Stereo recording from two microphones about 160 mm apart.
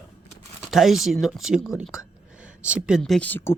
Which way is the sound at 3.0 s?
5° left (ahead or behind).